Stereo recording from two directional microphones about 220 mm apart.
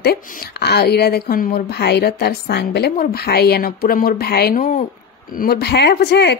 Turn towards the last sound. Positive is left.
turn(degrees=50)  # may be behind; listen again after turning